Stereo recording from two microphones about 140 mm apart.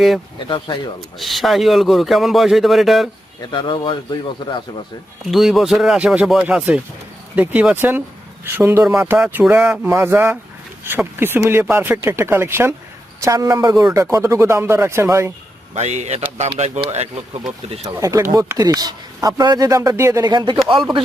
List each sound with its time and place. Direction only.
0.4 s a man's voice: 35° left (ahead or behind)
1.2 s a man's voice: centre (ahead or behind)
3.5 s a man's voice: 35° left (ahead or behind)
5.2 s a man's voice: centre (ahead or behind); by 9.1 s 20° right (ahead or behind)
9.1 s speech: 5° right (ahead or behind)
15.7 s speech: 55° right (ahead or behind)
17.8 s speech: 20° right (ahead or behind)